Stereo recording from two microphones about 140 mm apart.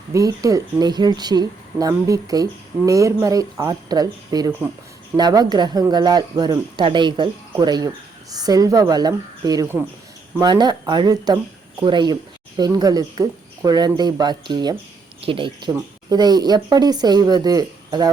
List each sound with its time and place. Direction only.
0.1 s speech: 25° right (ahead or behind)